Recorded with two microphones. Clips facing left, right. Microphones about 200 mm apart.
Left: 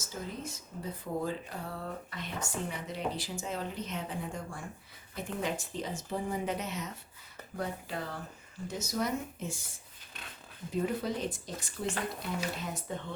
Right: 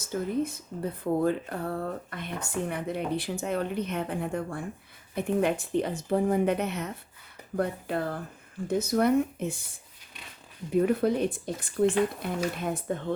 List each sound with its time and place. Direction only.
0.0 s speech: 60° right (ahead or behind)
10.7 s speech: 60° right (ahead or behind)